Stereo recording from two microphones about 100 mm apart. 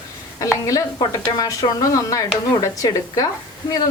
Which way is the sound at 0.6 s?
30° left (ahead or behind).